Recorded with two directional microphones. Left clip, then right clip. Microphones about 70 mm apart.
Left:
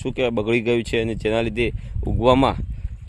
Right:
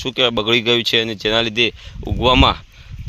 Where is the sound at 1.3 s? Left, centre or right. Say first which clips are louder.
Right 8 dB; left.